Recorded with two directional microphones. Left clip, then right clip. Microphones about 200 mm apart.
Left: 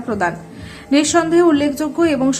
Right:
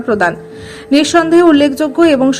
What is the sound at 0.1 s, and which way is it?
A woman's voice, 20° right (ahead or behind).